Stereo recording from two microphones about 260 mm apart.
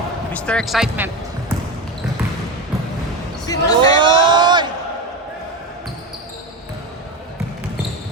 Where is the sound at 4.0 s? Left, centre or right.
Centre.